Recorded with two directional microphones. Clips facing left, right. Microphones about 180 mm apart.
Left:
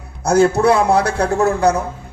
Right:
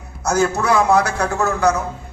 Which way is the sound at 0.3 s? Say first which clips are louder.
Left 5 dB; 30° left (ahead or behind).